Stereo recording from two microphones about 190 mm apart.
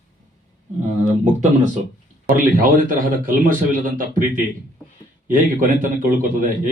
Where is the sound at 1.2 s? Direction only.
40° right (ahead or behind).